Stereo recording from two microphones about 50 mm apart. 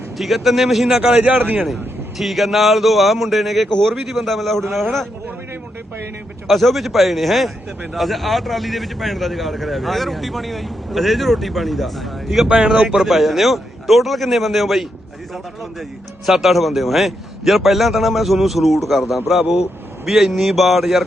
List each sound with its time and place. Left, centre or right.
0.2 s speech: centre
1.1 s a man's voice: right
1.6 s speech: centre
6.5 s speech: centre
12.5 s speech: centre
13.1 s speech: centre
16.2 s speech: centre